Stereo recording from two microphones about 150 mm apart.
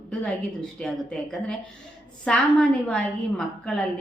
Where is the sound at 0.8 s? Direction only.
5° left (ahead or behind).